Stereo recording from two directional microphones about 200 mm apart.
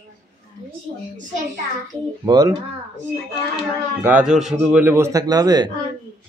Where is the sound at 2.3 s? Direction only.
20° right (ahead or behind).